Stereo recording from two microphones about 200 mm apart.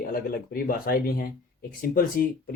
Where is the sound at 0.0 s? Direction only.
45° left (ahead or behind).